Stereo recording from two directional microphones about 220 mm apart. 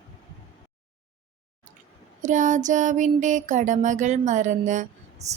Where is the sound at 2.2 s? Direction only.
35° right (ahead or behind).